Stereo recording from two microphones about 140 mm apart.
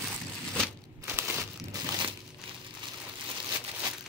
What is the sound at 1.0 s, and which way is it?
Crumpling, 20° right (ahead or behind).